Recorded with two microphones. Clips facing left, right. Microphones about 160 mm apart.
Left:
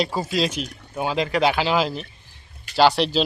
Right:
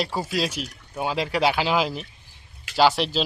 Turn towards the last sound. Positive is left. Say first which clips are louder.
# left 2 dB
turn(degrees=-5)  # may be behind; listen again after turning